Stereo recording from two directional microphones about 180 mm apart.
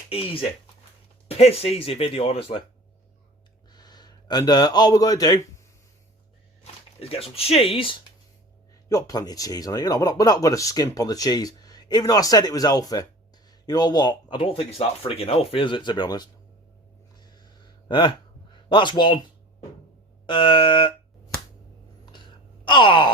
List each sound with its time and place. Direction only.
0.1 s speech: 30° left (ahead or behind)
3.7 s a man's voice: 25° left (ahead or behind)
7.0 s speech: 30° left (ahead or behind)
17.2 s a sound: 25° left (ahead or behind)
18.5 s a man's voice: 25° left (ahead or behind)
20.2 s speech: 25° left (ahead or behind)
22.1 s sigh: 25° left (ahead or behind)